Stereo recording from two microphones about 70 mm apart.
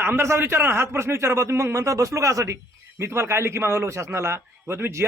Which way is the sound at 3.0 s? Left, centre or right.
Right.